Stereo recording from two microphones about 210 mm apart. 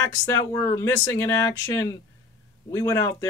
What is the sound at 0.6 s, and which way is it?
A man's voice, 15° left (ahead or behind).